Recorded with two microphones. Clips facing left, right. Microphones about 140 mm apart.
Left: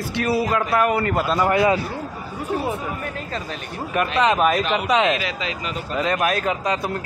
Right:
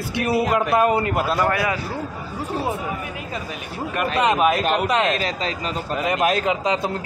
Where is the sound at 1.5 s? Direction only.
25° left (ahead or behind).